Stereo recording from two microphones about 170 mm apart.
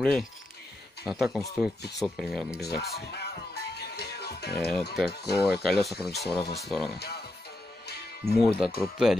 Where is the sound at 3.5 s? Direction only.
70° left (ahead or behind).